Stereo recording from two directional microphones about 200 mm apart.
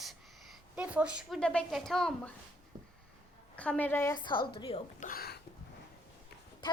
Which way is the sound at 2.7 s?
20° right (ahead or behind).